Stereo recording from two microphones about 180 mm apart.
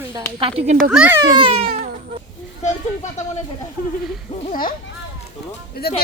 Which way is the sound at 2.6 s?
40° left (ahead or behind).